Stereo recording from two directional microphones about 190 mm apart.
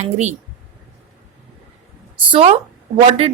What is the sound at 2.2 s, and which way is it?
Speech, 30° right (ahead or behind).